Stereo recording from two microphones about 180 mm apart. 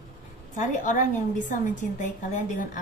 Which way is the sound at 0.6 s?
45° left (ahead or behind).